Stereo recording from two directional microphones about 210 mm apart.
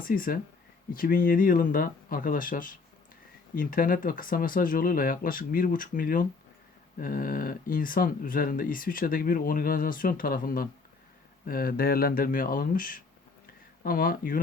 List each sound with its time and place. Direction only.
0.0 s speech: 40° left (ahead or behind)